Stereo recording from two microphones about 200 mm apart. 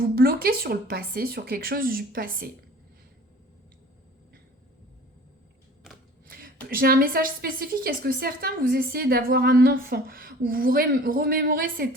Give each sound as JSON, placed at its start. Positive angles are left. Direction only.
{"t": 0.2, "sound": "a woman's voice", "side_deg": -50}
{"t": 6.2, "sound": "a woman's voice", "side_deg": -45}